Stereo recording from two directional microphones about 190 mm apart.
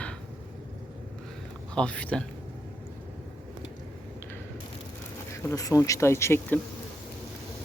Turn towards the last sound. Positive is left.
turn(degrees=10)  # may be behind; listen again after turning